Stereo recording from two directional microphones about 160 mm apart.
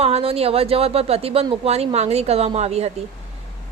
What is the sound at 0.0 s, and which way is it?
A woman's voice, 40° right (ahead or behind).